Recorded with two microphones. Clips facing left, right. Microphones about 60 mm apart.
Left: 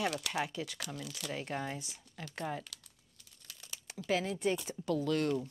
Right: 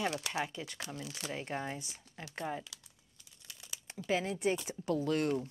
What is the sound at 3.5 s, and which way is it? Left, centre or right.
Crumpling, centre.